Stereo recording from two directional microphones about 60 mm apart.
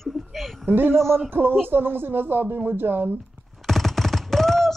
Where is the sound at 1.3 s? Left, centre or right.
Right.